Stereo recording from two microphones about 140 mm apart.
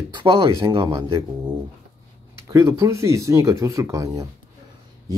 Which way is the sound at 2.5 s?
20° right (ahead or behind).